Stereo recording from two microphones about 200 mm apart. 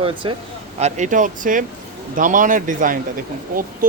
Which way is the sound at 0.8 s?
40° right (ahead or behind).